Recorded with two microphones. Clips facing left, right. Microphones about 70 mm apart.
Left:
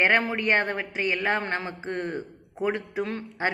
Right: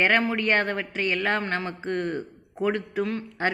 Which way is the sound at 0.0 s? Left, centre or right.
Left.